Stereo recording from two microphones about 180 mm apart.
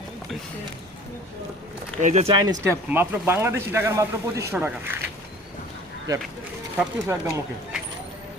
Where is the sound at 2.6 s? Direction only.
10° right (ahead or behind).